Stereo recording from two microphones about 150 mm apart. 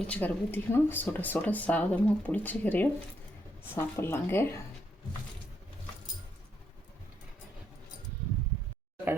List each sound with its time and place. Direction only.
0.1 s speech: 10° left (ahead or behind)